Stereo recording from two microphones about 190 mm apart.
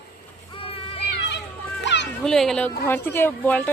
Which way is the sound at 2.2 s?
5° left (ahead or behind).